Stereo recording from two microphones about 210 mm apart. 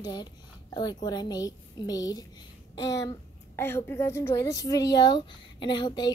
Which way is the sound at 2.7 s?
15° left (ahead or behind).